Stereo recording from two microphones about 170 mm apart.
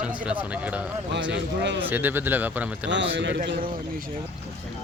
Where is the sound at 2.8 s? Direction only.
90° right.